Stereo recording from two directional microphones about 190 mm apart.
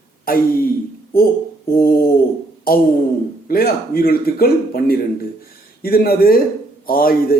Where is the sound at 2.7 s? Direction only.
50° left (ahead or behind).